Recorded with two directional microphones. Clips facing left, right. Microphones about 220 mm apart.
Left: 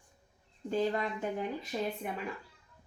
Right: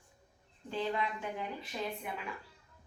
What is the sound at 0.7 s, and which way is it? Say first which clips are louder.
A woman's voice: left 4 dB; 45° left (ahead or behind).